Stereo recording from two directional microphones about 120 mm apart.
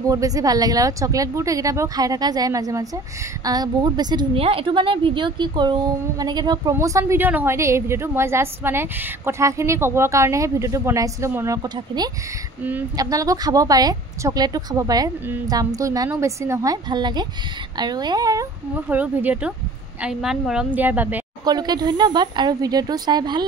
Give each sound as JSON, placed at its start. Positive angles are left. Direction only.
{"t": 0.1, "sound": "a woman's voice", "side_deg": -30}
{"t": 4.4, "sound": "speech", "side_deg": -50}
{"t": 7.2, "sound": "a woman's voice", "side_deg": -15}
{"t": 18.8, "sound": "a woman's voice", "side_deg": -15}
{"t": 21.5, "sound": "speech", "side_deg": -35}